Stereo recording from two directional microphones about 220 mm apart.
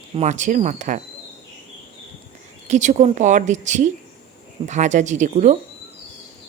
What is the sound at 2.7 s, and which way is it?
Speech, 35° right (ahead or behind).